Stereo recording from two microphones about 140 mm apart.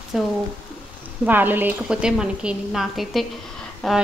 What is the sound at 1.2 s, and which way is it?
A woman's voice, 15° right (ahead or behind).